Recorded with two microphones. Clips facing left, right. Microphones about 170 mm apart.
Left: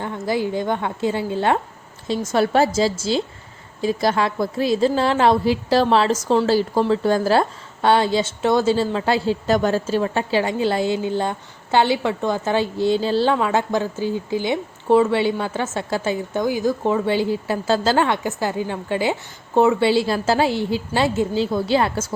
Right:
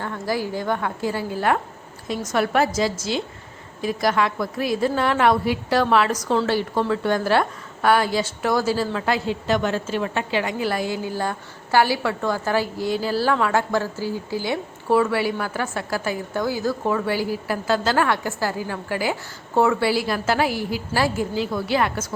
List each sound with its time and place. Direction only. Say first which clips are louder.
0.0 s a woman's voice: left 3 dB; 20° left (ahead or behind)